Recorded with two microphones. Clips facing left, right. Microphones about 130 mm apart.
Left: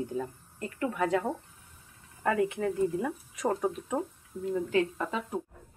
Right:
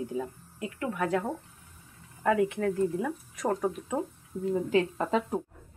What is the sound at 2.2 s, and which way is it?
A woman's voice, centre (ahead or behind).